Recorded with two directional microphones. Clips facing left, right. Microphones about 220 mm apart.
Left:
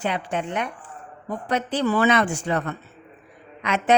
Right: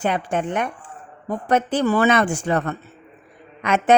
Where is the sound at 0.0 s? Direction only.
50° right (ahead or behind).